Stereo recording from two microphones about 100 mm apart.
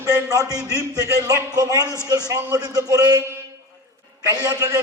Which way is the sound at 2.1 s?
35° right (ahead or behind).